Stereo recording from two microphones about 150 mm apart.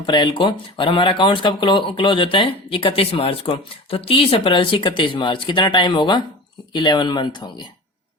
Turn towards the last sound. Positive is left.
turn(degrees=30)  # may be behind; listen again after turning